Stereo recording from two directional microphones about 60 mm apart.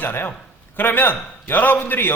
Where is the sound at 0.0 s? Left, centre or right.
Left.